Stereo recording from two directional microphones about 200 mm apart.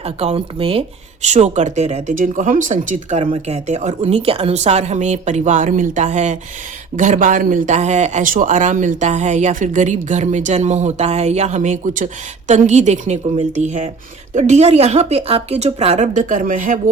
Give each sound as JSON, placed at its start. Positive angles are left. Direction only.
{"t": 0.0, "sound": "speech", "side_deg": -30}